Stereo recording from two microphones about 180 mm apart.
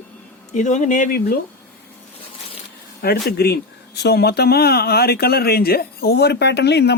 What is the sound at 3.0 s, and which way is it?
Speech, 60° left (ahead or behind).